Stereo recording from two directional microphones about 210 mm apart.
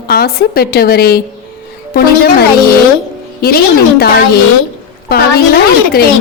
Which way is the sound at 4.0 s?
45° left (ahead or behind).